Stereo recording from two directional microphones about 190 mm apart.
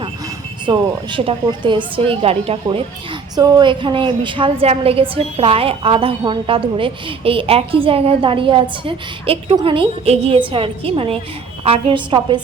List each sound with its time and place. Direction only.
0.6 s a woman's voice: 25° right (ahead or behind)